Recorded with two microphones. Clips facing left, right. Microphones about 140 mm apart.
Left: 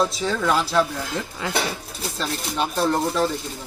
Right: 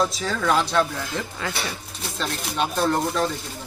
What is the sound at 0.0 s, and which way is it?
Speech, centre (ahead or behind).